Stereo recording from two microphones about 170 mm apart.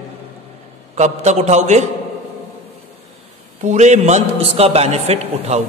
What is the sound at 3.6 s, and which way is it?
A man's voice, 45° right (ahead or behind).